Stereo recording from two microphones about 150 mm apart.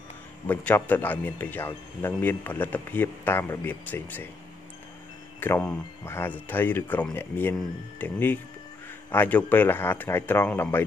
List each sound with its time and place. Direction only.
0.5 s speech: 10° left (ahead or behind)
5.4 s speech: 15° left (ahead or behind)